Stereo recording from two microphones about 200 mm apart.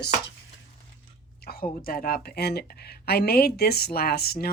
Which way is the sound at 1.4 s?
50° left (ahead or behind).